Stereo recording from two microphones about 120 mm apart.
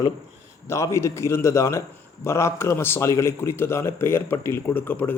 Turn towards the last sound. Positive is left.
turn(degrees=15)  # may be behind; listen again after turning